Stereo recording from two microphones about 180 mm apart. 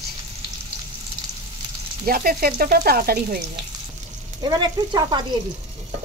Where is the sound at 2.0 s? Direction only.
50° right (ahead or behind).